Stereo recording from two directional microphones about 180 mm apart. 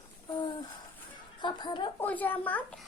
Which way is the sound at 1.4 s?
25° left (ahead or behind).